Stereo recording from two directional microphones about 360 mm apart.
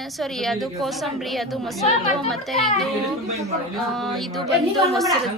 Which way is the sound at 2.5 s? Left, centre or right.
Centre.